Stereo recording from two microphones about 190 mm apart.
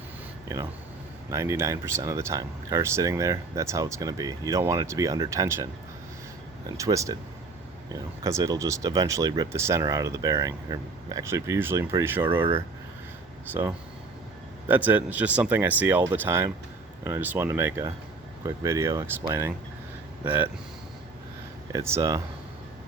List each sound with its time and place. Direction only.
0.4 s speech: 15° right (ahead or behind)
6.7 s speech: 20° right (ahead or behind)
8.2 s speech: 15° right (ahead or behind)
21.7 s speech: 15° right (ahead or behind)